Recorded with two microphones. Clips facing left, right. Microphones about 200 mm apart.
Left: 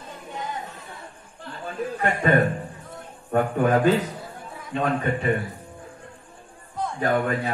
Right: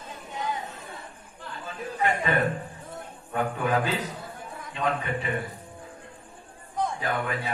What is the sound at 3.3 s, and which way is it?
A man's voice, 50° left (ahead or behind).